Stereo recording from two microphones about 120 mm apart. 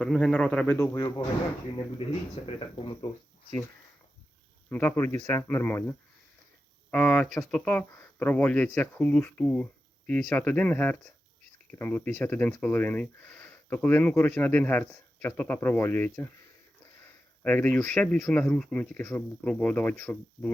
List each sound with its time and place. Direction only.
0.0 s speech: 5° left (ahead or behind)
0.9 s speech: 35° left (ahead or behind)
2.0 s speech: 55° left (ahead or behind)
4.7 s speech: 15° left (ahead or behind)
6.9 s speech: 5° left (ahead or behind)